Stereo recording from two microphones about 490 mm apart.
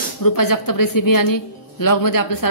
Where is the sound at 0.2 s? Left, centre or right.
Left.